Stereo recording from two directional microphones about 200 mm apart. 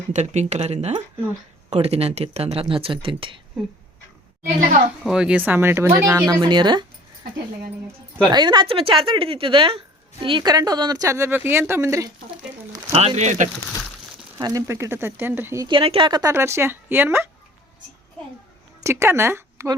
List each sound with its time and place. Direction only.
0.1 s speech: 35° right (ahead or behind)
5.0 s speech: 5° right (ahead or behind)
6.4 s speech: 20° right (ahead or behind)
8.3 s speech: 20° right (ahead or behind)
12.7 s speech: 30° right (ahead or behind)
14.3 s speech: 15° right (ahead or behind)
15.6 s speech: 25° right (ahead or behind); by 17.2 s 10° right (ahead or behind)
18.8 s speech: 15° right (ahead or behind)